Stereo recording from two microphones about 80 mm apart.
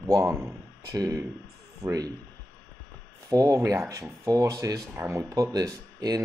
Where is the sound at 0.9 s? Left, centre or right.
Right.